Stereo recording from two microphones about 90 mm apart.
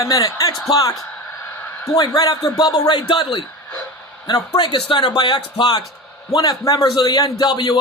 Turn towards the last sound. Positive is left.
turn(degrees=50)  # may be behind; listen again after turning